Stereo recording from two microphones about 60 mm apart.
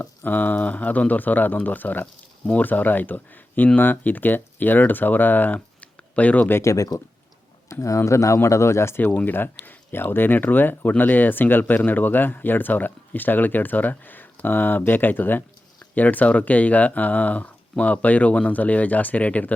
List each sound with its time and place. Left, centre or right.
0.0 s speech: left
5.5 s a sound: left
6.6 s speech: left
7.7 s speech: left
9.0 s speech: left